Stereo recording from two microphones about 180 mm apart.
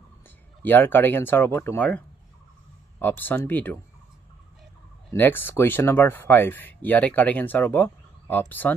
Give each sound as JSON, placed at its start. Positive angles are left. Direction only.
{"t": 0.6, "sound": "speech", "side_deg": 10}
{"t": 5.1, "sound": "speech", "side_deg": 10}